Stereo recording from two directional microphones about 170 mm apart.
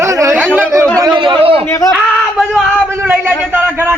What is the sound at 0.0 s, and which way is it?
Chatter, 15° right (ahead or behind).